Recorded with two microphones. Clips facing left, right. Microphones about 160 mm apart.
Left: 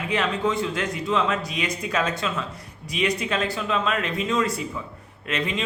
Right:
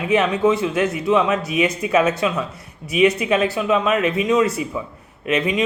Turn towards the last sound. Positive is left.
turn(degrees=-20)  # may be behind; listen again after turning